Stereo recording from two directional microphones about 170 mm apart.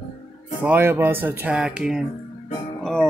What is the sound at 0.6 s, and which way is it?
Speech, 10° right (ahead or behind).